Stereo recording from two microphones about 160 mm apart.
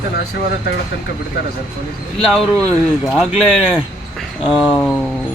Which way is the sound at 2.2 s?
5° left (ahead or behind).